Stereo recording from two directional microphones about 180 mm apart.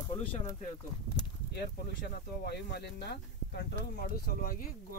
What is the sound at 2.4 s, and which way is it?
Speech, 65° left (ahead or behind).